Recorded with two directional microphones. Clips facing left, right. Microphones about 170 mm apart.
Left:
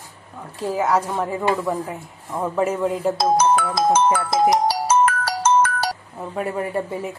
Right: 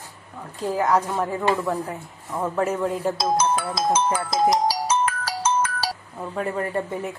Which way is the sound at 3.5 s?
60° left (ahead or behind).